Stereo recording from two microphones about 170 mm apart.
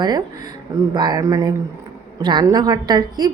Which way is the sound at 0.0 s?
25° right (ahead or behind).